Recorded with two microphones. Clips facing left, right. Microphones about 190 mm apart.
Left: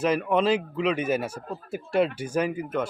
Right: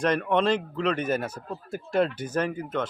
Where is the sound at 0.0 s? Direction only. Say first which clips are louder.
Left 1 dB; 5° left (ahead or behind).